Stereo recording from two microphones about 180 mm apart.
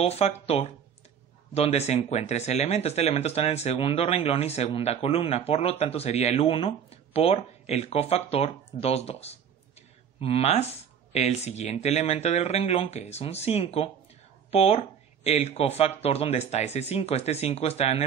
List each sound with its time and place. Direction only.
0.0 s speech: 35° left (ahead or behind)